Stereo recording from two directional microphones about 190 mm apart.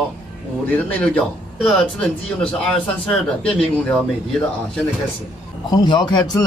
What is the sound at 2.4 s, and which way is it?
Speech, 5° left (ahead or behind).